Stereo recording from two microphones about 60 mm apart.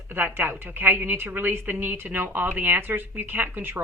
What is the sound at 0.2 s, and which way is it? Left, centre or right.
Speech, right.